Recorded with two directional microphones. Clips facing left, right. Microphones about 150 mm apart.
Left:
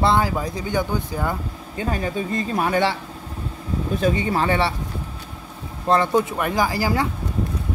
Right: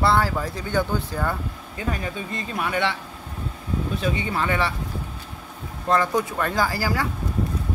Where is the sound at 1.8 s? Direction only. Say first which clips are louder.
Left 5 dB; 30° left (ahead or behind).